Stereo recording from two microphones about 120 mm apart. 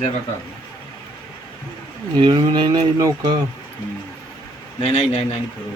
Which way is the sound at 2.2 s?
40° right (ahead or behind).